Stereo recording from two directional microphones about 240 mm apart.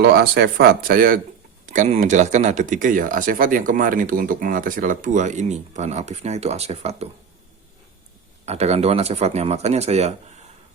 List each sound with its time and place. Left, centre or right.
0.0 s speech: right
8.4 s speech: right